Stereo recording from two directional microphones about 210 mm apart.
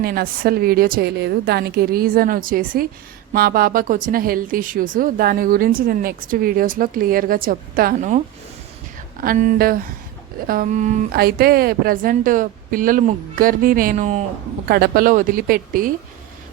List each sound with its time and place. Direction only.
0.0 s speech: 45° right (ahead or behind)
9.2 s speech: 40° right (ahead or behind)
14.7 s speech: 45° right (ahead or behind)